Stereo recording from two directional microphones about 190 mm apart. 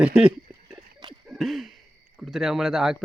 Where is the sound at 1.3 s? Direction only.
Centre (ahead or behind).